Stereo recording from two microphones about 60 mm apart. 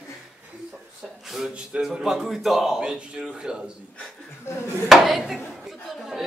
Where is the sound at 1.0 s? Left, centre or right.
Centre.